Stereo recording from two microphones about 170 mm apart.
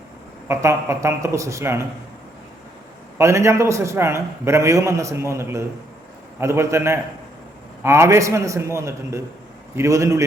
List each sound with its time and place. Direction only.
0.4 s a man's voice: 15° right (ahead or behind)
3.2 s a man's voice: 15° right (ahead or behind)